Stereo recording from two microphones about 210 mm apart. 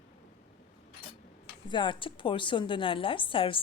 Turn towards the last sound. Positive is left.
turn(degrees=25)  # may be behind; listen again after turning